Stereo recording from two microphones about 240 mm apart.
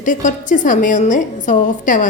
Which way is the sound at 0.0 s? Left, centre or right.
Left.